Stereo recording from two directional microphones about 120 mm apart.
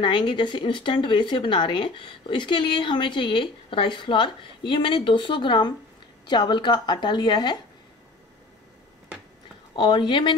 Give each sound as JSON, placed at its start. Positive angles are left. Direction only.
{"t": 0.0, "sound": "speech", "side_deg": 40}
{"t": 9.8, "sound": "speech", "side_deg": 40}